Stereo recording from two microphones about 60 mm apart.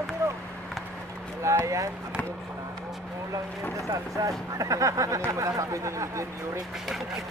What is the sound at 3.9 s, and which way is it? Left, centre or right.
Speech, right.